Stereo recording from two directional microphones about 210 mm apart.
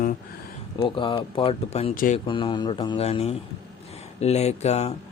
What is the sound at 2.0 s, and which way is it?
Speech, 40° left (ahead or behind).